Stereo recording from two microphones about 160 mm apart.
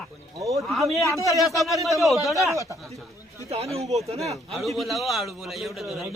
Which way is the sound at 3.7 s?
40° right (ahead or behind).